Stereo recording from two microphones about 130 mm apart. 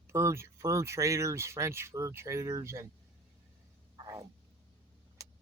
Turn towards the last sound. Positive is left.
turn(degrees=-25)  # may be behind; listen again after turning